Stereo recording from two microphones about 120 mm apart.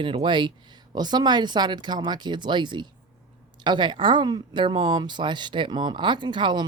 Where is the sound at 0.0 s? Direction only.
45° right (ahead or behind).